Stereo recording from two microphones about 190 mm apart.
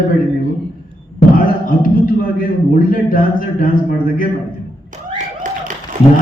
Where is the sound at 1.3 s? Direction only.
45° left (ahead or behind).